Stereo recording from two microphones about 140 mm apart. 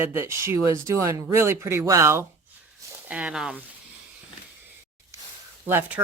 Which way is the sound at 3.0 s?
10° right (ahead or behind).